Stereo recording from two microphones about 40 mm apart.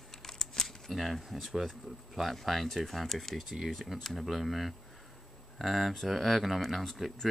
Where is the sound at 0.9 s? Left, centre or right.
Centre.